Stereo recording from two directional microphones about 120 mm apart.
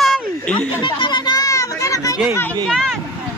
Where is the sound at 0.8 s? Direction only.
40° left (ahead or behind).